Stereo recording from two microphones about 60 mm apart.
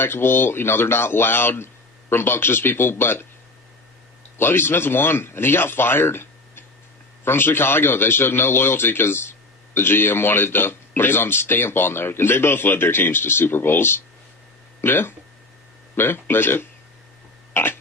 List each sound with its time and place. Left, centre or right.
0.0 s a man's voice: left
4.4 s a man's voice: left
17.5 s a sound: left